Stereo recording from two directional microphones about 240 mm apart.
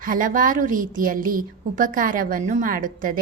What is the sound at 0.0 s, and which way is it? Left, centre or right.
A woman's voice, right.